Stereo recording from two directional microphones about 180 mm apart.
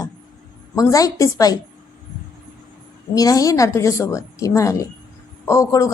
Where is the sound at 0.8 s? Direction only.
20° left (ahead or behind).